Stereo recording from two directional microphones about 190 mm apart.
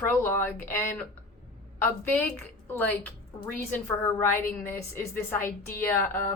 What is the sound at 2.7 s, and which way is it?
A woman's voice, 10° left (ahead or behind).